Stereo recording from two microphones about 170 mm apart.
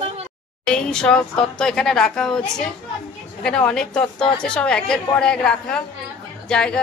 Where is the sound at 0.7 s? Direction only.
5° left (ahead or behind).